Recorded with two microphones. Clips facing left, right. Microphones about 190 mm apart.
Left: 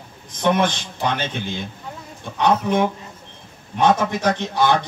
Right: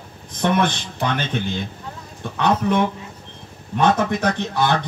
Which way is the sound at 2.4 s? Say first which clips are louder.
Left 1 dB; 55° left (ahead or behind).